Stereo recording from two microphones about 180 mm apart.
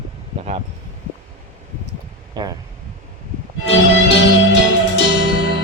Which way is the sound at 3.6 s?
85° left.